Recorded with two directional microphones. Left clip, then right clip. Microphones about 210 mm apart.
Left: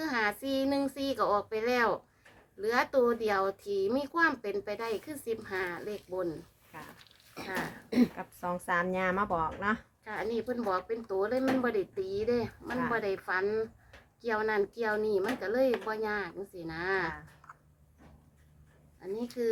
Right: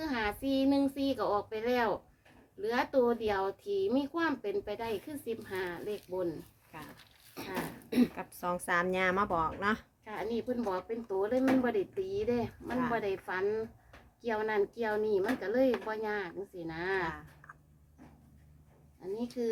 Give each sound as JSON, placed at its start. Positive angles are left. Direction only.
{"t": 0.0, "sound": "a sound", "side_deg": 10}
{"t": 0.7, "sound": "speech", "side_deg": 10}
{"t": 8.1, "sound": "a woman's voice", "side_deg": -10}